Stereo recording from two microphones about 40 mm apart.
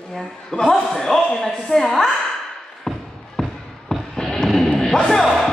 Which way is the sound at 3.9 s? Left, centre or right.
Centre.